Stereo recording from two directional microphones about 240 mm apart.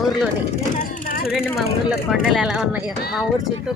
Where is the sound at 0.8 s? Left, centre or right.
Left.